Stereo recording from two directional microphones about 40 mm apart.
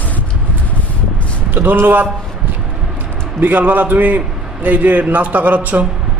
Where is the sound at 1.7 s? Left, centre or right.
Right.